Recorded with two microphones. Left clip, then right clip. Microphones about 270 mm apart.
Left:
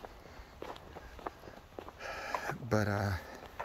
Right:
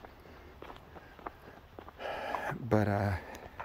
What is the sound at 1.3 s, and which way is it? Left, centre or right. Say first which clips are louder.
Walk: left 1 dB; left.